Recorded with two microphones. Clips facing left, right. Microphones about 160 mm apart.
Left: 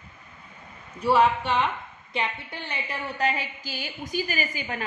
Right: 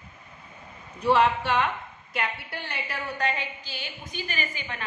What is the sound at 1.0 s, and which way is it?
Speech, 10° left (ahead or behind).